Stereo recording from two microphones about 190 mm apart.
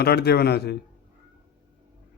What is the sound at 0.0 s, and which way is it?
Speech, 55° left (ahead or behind).